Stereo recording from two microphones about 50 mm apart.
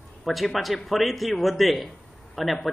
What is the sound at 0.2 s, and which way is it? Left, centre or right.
A man's voice, centre.